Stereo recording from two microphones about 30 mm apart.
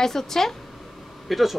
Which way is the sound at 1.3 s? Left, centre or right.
Centre.